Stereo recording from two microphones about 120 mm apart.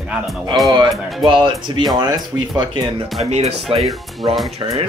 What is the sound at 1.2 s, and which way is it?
Speech, 45° right (ahead or behind).